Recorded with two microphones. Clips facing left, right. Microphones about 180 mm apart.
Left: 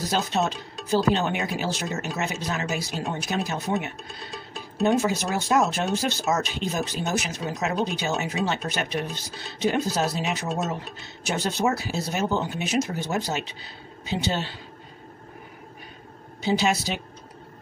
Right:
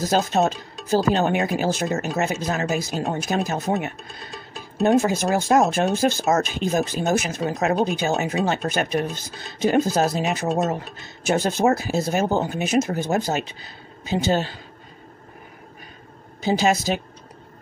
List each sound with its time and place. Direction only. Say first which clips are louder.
0.0 s speech: right 5 dB; 45° right (ahead or behind)
4.3 s music: even; centre (ahead or behind)
4.8 s speech: right 4 dB; 45° right (ahead or behind)
16.4 s speech: right 4 dB; 45° right (ahead or behind)